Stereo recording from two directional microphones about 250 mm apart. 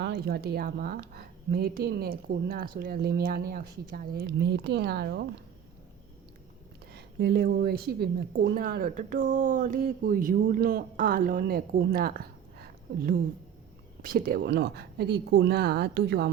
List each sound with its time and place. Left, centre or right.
0.0 s a woman's voice: right
6.9 s a woman's voice: right
14.0 s a woman's voice: right